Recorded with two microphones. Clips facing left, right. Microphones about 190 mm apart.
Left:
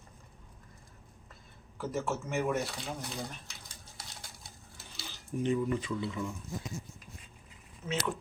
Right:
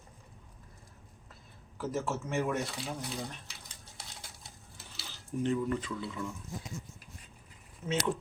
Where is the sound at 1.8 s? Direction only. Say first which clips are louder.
Even; centre (ahead or behind).